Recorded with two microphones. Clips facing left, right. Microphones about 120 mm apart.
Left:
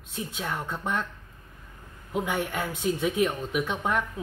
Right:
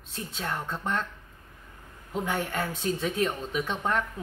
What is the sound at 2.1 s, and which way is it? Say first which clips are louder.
Speech: left 1 dB; 10° left (ahead or behind).